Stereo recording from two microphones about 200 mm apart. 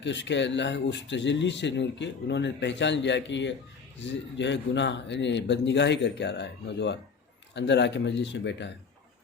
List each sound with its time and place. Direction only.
0.0 s speech: 65° left (ahead or behind)